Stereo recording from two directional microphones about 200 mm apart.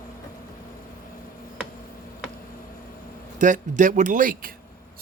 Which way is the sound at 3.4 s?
40° right (ahead or behind).